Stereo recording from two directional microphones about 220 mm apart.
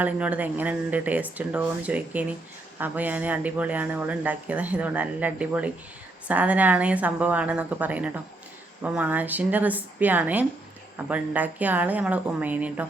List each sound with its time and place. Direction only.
0.0 s speech: 5° right (ahead or behind)